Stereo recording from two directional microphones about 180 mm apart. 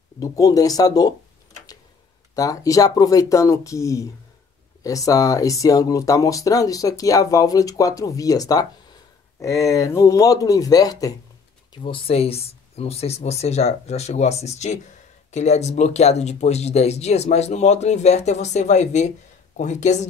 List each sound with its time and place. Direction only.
0.2 s speech: 20° left (ahead or behind)
2.3 s speech: 20° left (ahead or behind); by 20.1 s 40° left (ahead or behind)